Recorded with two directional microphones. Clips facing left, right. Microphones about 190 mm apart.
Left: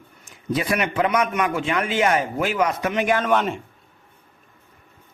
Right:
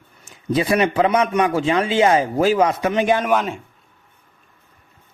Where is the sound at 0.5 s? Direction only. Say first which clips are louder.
Right 5 dB; 30° right (ahead or behind).